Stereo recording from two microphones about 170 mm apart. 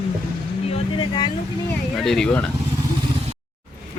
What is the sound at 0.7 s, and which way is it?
Vehicle, 30° left (ahead or behind).